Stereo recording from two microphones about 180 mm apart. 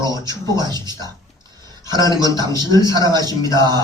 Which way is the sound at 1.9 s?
25° right (ahead or behind).